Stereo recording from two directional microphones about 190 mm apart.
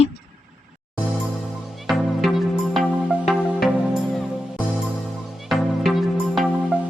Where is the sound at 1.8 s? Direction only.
Centre (ahead or behind).